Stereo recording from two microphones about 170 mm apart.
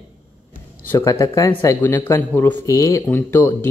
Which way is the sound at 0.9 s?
20° left (ahead or behind).